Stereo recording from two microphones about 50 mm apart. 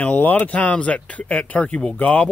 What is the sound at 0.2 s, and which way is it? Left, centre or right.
Speech, left.